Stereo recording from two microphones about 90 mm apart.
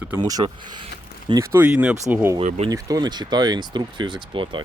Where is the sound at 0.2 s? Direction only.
45° right (ahead or behind).